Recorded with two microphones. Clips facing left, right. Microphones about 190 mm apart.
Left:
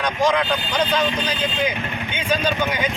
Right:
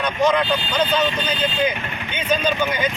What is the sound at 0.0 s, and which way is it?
Speech, 10° left (ahead or behind).